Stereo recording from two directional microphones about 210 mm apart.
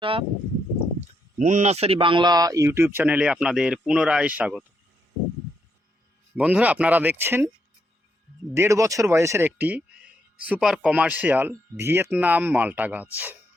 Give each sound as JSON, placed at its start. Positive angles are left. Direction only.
{"t": 0.0, "sound": "a sound", "side_deg": -25}
{"t": 1.0, "sound": "speech", "side_deg": -35}
{"t": 6.3, "sound": "speech", "side_deg": -5}
{"t": 8.5, "sound": "speech", "side_deg": -15}